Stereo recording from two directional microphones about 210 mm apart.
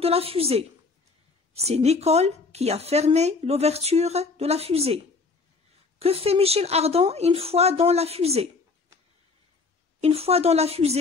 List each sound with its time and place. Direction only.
0.0 s speech: 30° right (ahead or behind)
10.0 s speech: 30° right (ahead or behind)